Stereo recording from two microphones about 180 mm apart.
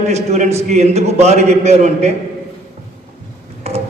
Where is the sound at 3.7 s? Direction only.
35° right (ahead or behind).